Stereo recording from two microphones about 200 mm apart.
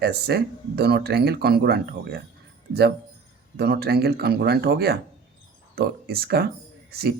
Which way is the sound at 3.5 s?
55° right (ahead or behind).